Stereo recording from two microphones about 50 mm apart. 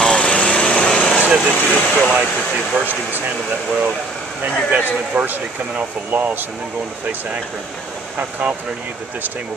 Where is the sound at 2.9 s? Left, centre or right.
Right.